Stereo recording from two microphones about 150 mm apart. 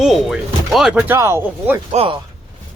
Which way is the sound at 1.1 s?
15° right (ahead or behind).